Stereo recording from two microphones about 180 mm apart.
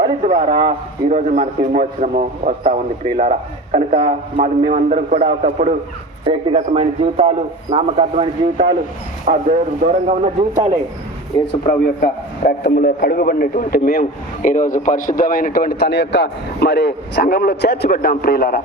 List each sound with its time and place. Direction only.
0.0 s a man's voice: 30° right (ahead or behind)
1.1 s a man's voice: 45° right (ahead or behind)
11.6 s a man's voice: 45° left (ahead or behind)